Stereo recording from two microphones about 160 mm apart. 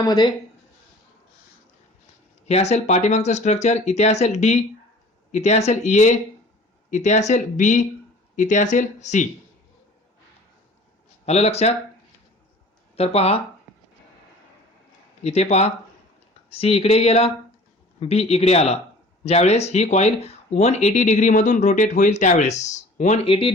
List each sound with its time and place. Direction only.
0.0 s speech: 25° left (ahead or behind)
2.5 s speech: 40° left (ahead or behind)
11.3 s speech: 40° left (ahead or behind)
13.0 s speech: 40° left (ahead or behind)
15.2 s speech: 40° left (ahead or behind)